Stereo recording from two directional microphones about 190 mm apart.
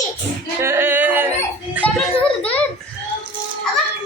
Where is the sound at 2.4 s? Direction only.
5° left (ahead or behind).